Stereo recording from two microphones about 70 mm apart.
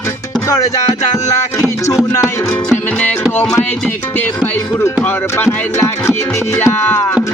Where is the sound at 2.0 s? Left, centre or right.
Left.